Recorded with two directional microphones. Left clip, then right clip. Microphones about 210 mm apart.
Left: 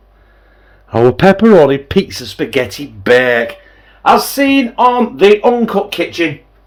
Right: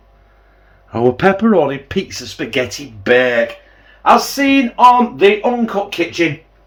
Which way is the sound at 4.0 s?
50° left (ahead or behind).